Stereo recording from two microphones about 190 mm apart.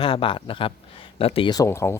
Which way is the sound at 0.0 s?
25° left (ahead or behind).